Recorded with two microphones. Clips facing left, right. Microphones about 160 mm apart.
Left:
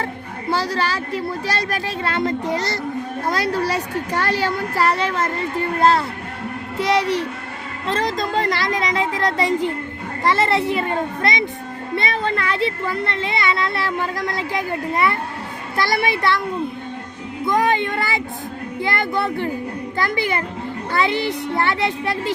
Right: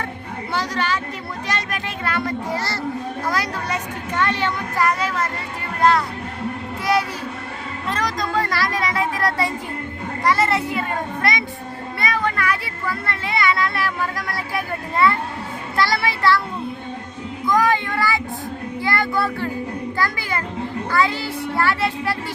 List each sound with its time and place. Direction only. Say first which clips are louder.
0.5 s speech: left 2 dB; 30° left (ahead or behind)
17.4 s a child's voice: even; 25° left (ahead or behind)